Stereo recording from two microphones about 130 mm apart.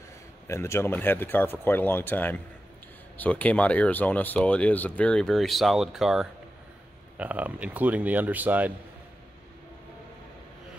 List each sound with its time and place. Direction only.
0.5 s speech: 20° left (ahead or behind); by 8.7 s 15° right (ahead or behind)